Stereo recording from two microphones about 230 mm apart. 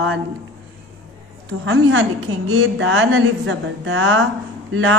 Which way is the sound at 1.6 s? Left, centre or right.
Right.